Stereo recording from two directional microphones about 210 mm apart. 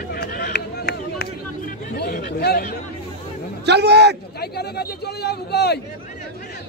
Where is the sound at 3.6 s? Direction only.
55° right (ahead or behind).